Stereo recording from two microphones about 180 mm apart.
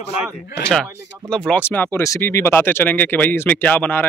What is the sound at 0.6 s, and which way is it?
Speech, 5° left (ahead or behind).